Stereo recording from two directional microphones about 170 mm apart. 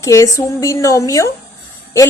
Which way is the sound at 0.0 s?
20° left (ahead or behind).